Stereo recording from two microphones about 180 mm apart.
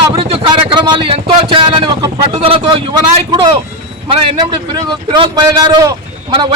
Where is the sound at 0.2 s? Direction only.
30° right (ahead or behind).